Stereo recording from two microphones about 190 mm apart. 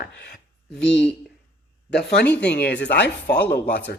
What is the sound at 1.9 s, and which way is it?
Speech, 60° left (ahead or behind).